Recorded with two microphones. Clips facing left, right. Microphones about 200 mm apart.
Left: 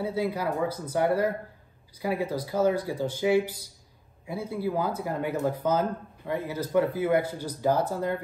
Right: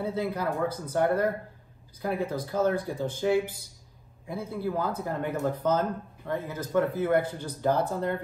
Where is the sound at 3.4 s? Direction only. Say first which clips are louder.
Left 2 dB; 55° right (ahead or behind).